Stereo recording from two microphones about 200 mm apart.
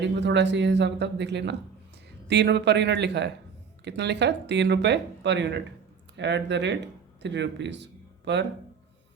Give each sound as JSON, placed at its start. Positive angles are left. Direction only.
{"t": 0.0, "sound": "speech", "side_deg": -60}